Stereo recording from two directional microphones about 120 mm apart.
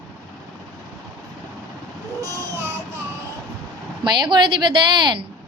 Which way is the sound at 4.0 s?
40° right (ahead or behind).